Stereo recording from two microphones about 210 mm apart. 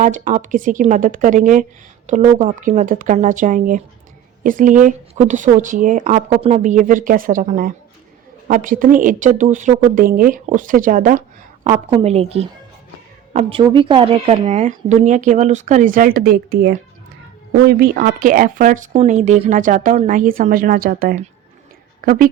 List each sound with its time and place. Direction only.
0.0 s a woman's voice: 35° right (ahead or behind)